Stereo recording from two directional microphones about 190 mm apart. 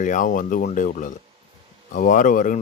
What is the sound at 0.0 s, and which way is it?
Speech, 40° left (ahead or behind).